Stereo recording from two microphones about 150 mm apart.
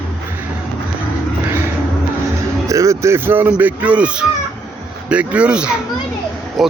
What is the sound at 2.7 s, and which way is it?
Speech, 20° right (ahead or behind).